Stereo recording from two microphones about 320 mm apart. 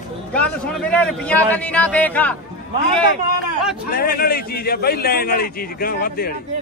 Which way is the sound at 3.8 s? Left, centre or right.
Left.